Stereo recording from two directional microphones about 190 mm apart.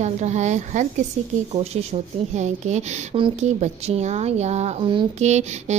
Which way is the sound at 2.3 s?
35° right (ahead or behind).